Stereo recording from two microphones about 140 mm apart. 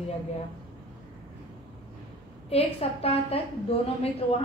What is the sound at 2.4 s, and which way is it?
A woman's voice, 45° left (ahead or behind).